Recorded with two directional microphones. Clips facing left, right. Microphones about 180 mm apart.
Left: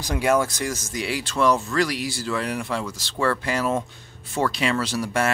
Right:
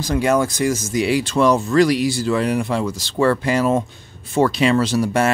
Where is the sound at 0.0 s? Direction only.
10° left (ahead or behind).